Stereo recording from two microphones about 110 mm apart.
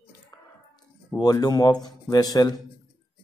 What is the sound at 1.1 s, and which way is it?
A man's voice, 35° left (ahead or behind).